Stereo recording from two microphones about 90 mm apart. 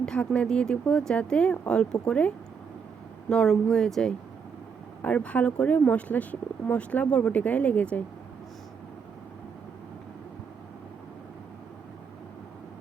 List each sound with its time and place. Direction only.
0.0 s a sound: 10° left (ahead or behind)
0.3 s speech: 10° left (ahead or behind)
5.0 s speech: 15° left (ahead or behind)